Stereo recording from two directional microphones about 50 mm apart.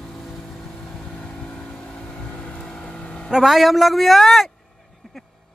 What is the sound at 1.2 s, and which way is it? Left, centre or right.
Vehicle, left.